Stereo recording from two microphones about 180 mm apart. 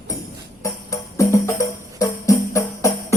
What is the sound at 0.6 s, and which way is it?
Music, 15° left (ahead or behind).